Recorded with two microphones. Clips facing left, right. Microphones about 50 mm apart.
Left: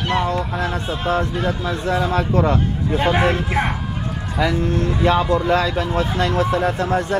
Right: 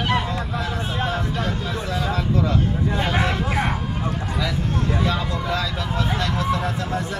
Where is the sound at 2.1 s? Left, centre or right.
Left.